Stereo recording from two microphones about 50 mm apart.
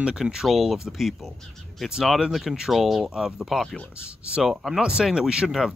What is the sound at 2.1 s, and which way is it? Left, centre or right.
Speech, centre.